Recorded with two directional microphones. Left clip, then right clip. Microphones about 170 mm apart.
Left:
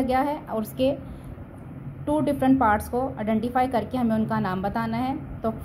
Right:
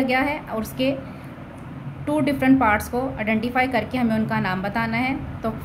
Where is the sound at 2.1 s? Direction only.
20° left (ahead or behind).